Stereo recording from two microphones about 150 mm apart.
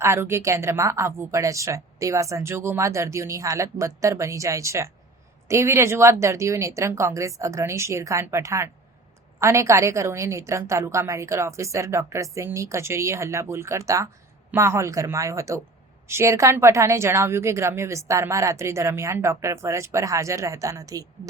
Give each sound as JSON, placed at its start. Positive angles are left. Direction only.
{"t": 0.0, "sound": "a woman's voice", "side_deg": -15}